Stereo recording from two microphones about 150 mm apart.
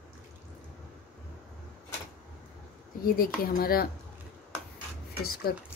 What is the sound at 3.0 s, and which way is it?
Speech, 75° left (ahead or behind).